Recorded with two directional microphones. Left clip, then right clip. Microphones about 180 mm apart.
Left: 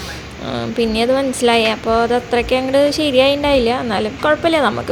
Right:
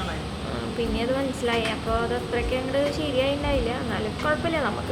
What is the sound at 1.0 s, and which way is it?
Speech, 45° left (ahead or behind).